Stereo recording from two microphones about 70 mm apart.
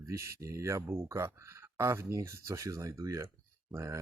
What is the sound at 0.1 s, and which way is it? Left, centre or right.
Speech, right.